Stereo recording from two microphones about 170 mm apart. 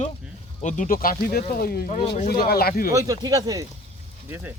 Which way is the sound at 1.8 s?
40° left (ahead or behind).